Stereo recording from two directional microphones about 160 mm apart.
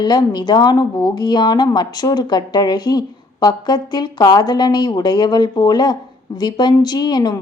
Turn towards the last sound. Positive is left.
turn(degrees=25)  # may be behind; listen again after turning